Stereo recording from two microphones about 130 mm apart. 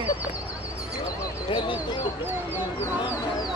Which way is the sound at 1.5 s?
40° left (ahead or behind).